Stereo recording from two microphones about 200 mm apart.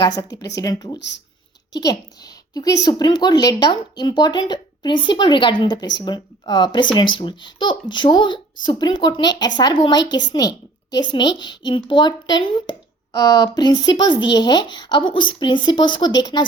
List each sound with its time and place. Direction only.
0.0 s speech: 20° left (ahead or behind)
0.9 s speech: 60° left (ahead or behind)
1.8 s a woman's voice: 20° left (ahead or behind)